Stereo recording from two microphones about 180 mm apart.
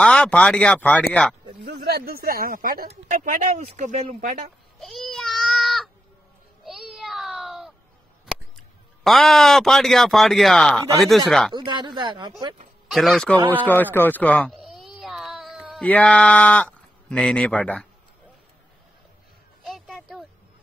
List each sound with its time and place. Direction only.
0.0 s speech: 5° left (ahead or behind)
1.6 s speech: 60° right (ahead or behind)
3.2 s speech: 40° right (ahead or behind)
4.7 s a sound: centre (ahead or behind)
9.0 s speech: centre (ahead or behind)
11.5 s speech: 25° right (ahead or behind)
12.9 s speech: centre (ahead or behind)
13.9 s cat: 10° left (ahead or behind)
19.6 s a sound: centre (ahead or behind)